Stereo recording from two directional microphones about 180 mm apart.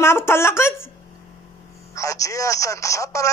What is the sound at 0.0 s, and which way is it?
Speech, 15° left (ahead or behind).